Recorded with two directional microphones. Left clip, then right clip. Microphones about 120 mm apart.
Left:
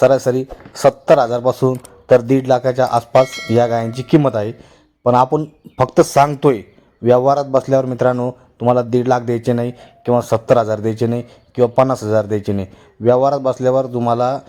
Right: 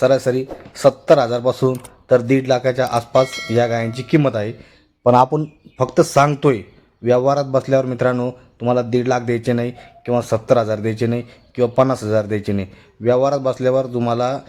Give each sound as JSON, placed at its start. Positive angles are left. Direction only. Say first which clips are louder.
{"t": 0.0, "sound": "speech", "louder": "left 3 dB", "side_deg": 30}
{"t": 3.2, "sound": "speech", "louder": "left 3 dB", "side_deg": 0}
{"t": 3.5, "sound": "speech", "louder": "left 3 dB", "side_deg": 30}
{"t": 5.0, "sound": "speech", "louder": "even", "side_deg": 0}
{"t": 5.7, "sound": "speech", "louder": "left 3 dB", "side_deg": 35}